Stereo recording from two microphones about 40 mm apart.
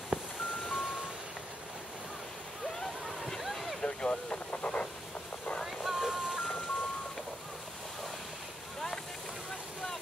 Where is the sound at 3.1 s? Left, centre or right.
Centre.